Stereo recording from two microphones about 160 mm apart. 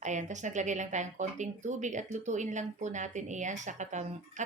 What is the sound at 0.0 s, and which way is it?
Speech, 50° right (ahead or behind).